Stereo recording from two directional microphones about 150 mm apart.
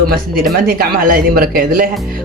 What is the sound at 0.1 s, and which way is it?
Speech, 75° right (ahead or behind).